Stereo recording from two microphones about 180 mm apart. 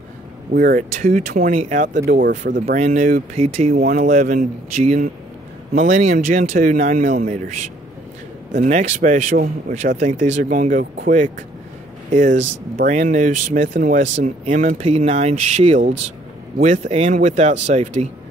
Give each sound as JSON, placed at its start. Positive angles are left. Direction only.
{"t": 0.5, "sound": "speech", "side_deg": -55}
{"t": 3.7, "sound": "speech", "side_deg": -50}
{"t": 5.7, "sound": "speech", "side_deg": -45}
{"t": 8.5, "sound": "speech", "side_deg": -45}
{"t": 14.9, "sound": "speech", "side_deg": -35}